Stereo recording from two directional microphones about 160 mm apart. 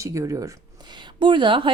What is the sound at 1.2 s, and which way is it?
Speech, 30° right (ahead or behind).